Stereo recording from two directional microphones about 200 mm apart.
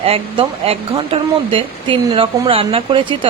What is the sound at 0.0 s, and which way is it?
Speech, 30° right (ahead or behind).